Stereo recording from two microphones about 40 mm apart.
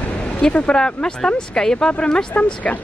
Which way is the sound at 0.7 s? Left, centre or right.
Left.